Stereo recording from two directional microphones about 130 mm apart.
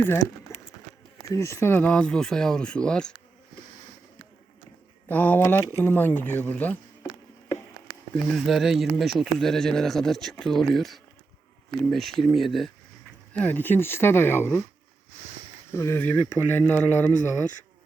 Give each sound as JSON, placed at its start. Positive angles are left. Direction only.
{"t": 0.5, "sound": "a sound", "side_deg": 20}
{"t": 1.3, "sound": "speech", "side_deg": 20}
{"t": 5.0, "sound": "speech", "side_deg": 15}
{"t": 8.1, "sound": "speech", "side_deg": -5}
{"t": 13.3, "sound": "speech", "side_deg": 15}
{"t": 15.7, "sound": "speech", "side_deg": 20}